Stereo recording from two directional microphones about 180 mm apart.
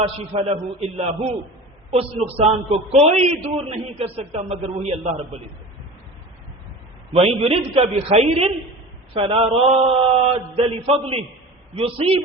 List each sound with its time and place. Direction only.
0.3 s a man's voice: 35° right (ahead or behind)
7.1 s a man's voice: 35° right (ahead or behind)